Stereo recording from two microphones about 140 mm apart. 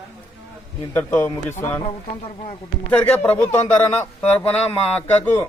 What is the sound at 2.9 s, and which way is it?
A man's voice, 10° left (ahead or behind).